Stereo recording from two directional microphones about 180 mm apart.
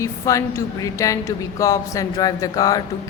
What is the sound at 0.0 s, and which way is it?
A woman's voice, 15° left (ahead or behind).